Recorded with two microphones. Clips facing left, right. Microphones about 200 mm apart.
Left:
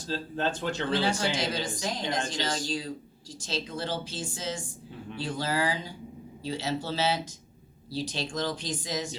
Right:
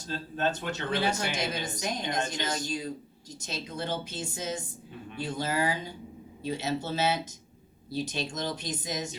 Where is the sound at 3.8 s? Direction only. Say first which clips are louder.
Even; 20° right (ahead or behind).